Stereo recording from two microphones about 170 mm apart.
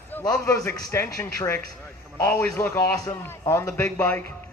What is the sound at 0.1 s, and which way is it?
A man's voice, 10° left (ahead or behind).